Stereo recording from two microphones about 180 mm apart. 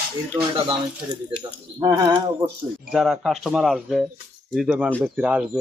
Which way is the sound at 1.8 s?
25° right (ahead or behind).